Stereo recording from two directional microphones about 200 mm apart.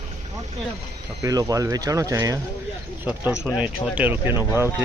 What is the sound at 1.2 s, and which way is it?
Speech, 20° right (ahead or behind).